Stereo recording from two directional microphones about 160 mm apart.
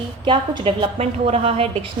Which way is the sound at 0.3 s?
30° right (ahead or behind).